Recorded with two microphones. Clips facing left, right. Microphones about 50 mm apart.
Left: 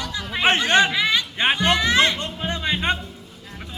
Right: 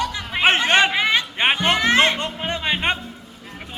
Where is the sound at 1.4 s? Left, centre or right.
Right.